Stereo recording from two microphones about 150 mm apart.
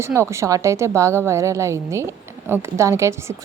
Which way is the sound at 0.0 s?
20° right (ahead or behind).